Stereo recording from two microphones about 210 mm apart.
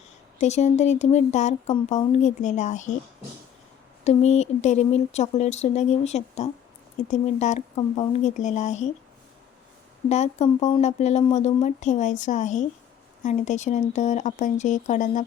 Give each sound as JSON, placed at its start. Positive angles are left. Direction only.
{"t": 0.3, "sound": "speech", "side_deg": 35}
{"t": 4.0, "sound": "speech", "side_deg": 30}
{"t": 10.1, "sound": "speech", "side_deg": 30}